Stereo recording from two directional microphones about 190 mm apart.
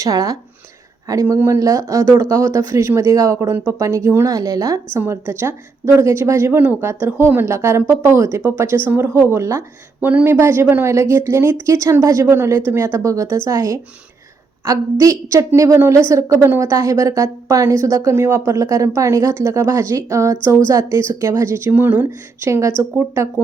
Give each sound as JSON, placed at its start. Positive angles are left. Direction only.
{"t": 0.0, "sound": "speech", "side_deg": -20}